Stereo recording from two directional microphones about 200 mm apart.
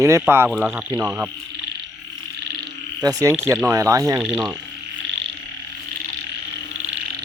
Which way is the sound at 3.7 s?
15° right (ahead or behind).